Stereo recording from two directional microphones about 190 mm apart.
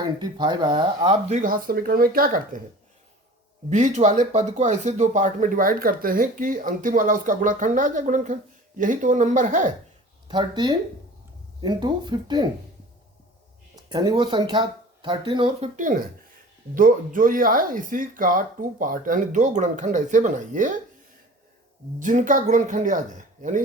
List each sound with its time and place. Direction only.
0.0 s speech: 20° right (ahead or behind)
1.3 s speech: 45° right (ahead or behind)
3.7 s speech: 40° right (ahead or behind)
10.2 s speech: 25° right (ahead or behind)
13.9 s speech: 20° right (ahead or behind)
15.7 s speech: 40° right (ahead or behind)
21.9 s speech: 40° right (ahead or behind)